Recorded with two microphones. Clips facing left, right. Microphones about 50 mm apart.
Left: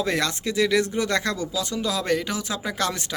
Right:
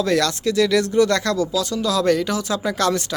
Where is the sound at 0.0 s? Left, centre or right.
Centre.